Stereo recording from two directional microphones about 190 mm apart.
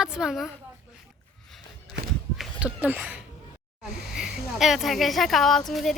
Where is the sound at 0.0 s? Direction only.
5° right (ahead or behind).